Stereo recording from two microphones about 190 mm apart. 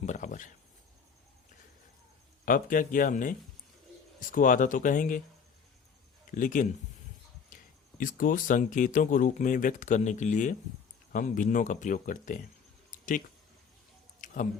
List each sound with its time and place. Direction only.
0.0 s cricket: 40° left (ahead or behind)
2.4 s speech: 45° left (ahead or behind)
6.3 s speech: 45° left (ahead or behind)
12.9 s a sound: 45° left (ahead or behind)